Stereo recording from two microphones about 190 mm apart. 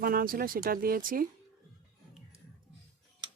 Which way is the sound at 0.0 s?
50° right (ahead or behind).